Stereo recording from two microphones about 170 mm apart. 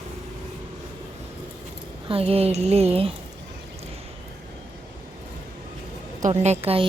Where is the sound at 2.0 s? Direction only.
35° right (ahead or behind).